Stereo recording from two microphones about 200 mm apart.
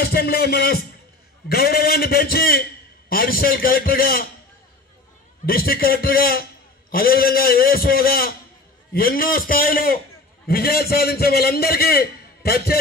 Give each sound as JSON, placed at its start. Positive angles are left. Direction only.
{"t": 0.0, "sound": "a man's voice", "side_deg": 50}
{"t": 5.4, "sound": "a man's voice", "side_deg": 50}